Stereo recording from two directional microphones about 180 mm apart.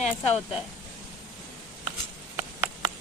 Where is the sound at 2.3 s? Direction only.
20° right (ahead or behind).